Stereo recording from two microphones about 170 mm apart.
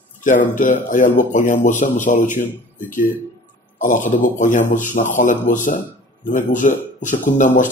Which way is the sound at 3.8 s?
50° left (ahead or behind).